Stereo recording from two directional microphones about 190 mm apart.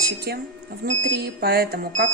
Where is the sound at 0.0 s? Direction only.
55° right (ahead or behind).